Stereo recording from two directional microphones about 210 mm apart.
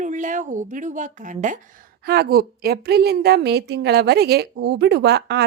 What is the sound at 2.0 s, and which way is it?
A woman's voice, 50° right (ahead or behind).